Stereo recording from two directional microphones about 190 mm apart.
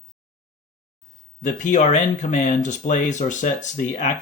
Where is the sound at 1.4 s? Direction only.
40° left (ahead or behind).